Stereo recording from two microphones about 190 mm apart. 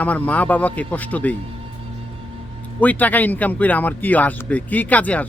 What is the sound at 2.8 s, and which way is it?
Speech, 10° left (ahead or behind).